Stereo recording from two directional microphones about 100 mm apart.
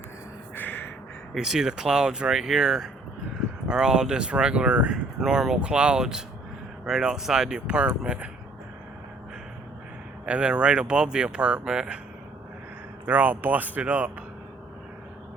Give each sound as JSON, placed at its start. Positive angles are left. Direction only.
{"t": 0.5, "sound": "gasp", "side_deg": 20}
{"t": 1.3, "sound": "speech", "side_deg": -5}
{"t": 10.2, "sound": "speech", "side_deg": -10}
{"t": 13.1, "sound": "speech", "side_deg": -15}